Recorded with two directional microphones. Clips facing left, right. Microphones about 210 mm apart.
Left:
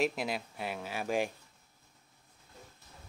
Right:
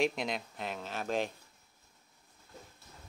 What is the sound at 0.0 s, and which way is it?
Speech, 5° left (ahead or behind).